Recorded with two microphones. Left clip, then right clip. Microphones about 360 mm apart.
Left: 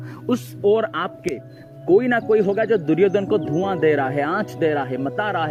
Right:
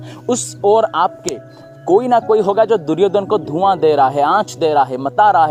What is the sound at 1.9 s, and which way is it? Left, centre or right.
Speech, right.